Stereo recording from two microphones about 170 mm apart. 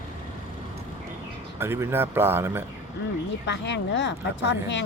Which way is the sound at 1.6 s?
15° right (ahead or behind).